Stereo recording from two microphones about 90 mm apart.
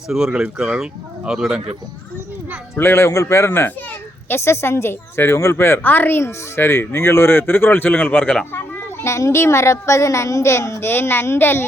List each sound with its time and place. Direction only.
0.1 s speech: 10° right (ahead or behind)
2.7 s a child's voice: 30° left (ahead or behind)
8.2 s speech: 10° left (ahead or behind)
8.5 s a child's voice: 30° left (ahead or behind)